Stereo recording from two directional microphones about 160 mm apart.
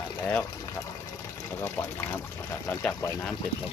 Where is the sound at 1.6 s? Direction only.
15° left (ahead or behind).